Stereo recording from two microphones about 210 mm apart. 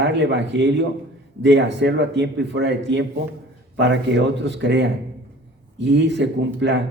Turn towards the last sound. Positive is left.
turn(degrees=-55)  # may be behind; listen again after turning